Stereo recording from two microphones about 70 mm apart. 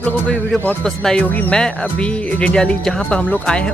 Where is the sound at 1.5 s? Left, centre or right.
Centre.